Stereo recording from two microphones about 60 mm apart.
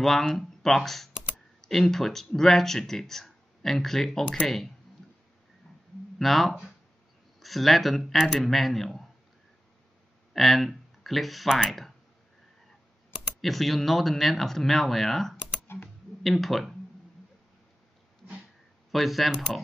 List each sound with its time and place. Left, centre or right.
0.0 s speech: centre
6.1 s speech: centre
10.3 s speech: centre
13.4 s speech: centre
15.6 s typing: left
16.2 s speech: centre
18.9 s speech: centre